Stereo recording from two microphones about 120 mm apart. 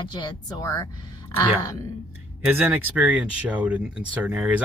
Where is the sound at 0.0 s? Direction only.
35° left (ahead or behind).